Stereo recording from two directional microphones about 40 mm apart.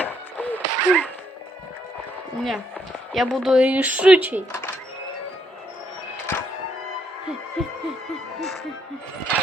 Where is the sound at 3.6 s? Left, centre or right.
Right.